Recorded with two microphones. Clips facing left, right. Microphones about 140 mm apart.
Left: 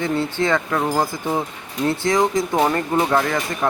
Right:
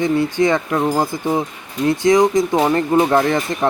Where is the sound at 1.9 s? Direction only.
20° right (ahead or behind).